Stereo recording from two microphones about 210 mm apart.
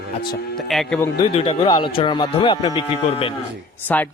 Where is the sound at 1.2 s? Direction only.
25° left (ahead or behind).